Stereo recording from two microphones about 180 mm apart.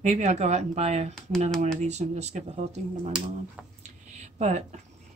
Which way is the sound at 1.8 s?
40° right (ahead or behind).